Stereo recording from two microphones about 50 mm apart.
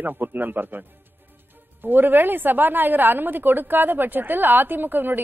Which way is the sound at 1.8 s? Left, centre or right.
Right.